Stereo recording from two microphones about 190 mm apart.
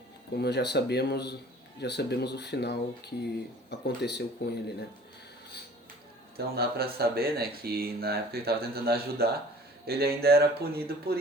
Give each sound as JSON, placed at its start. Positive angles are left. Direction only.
{"t": 0.3, "sound": "speech", "side_deg": 60}
{"t": 6.3, "sound": "speech", "side_deg": -55}